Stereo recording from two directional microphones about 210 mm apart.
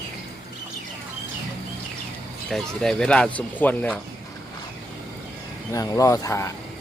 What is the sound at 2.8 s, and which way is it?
Speech, 5° left (ahead or behind).